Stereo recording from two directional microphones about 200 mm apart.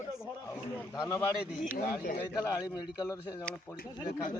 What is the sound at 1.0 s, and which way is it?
Speech, 15° left (ahead or behind).